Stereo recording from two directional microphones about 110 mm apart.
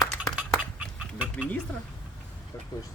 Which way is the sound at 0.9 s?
10° right (ahead or behind).